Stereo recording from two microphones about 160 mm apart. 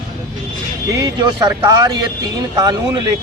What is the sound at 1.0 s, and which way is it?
Speech, 25° right (ahead or behind).